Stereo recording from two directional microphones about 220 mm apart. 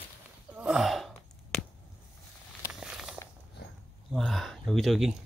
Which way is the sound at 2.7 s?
Centre (ahead or behind).